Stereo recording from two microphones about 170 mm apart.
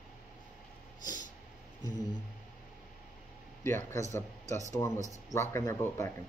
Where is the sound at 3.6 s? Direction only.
15° left (ahead or behind).